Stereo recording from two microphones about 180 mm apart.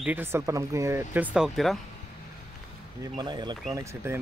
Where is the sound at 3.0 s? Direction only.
25° right (ahead or behind).